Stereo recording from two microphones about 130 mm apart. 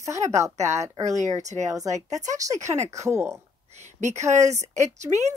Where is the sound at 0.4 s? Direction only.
60° right (ahead or behind).